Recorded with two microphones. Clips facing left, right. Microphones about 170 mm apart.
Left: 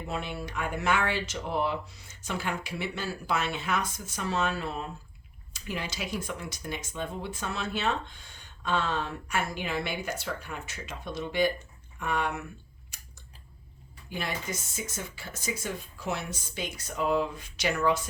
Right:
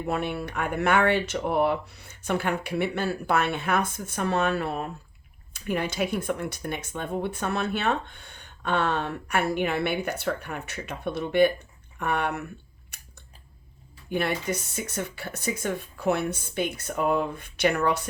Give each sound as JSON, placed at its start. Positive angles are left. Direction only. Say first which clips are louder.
{"t": 0.1, "sound": "speech", "louder": "right 6 dB", "side_deg": -60}
{"t": 12.9, "sound": "scissors", "louder": "right 2 dB", "side_deg": -60}
{"t": 14.1, "sound": "speech", "louder": "right 8 dB", "side_deg": -60}